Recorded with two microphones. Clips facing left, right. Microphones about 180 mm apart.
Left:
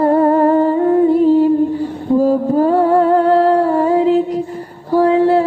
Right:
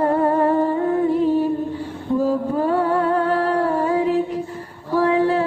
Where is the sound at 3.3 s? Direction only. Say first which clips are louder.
Left 7 dB; 30° left (ahead or behind).